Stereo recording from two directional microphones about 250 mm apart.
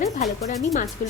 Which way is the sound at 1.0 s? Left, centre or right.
Left.